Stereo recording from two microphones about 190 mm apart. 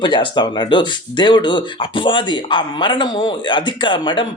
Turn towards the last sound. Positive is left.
turn(degrees=25)  # may be behind; listen again after turning